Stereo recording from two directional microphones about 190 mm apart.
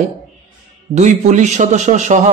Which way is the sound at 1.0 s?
40° right (ahead or behind).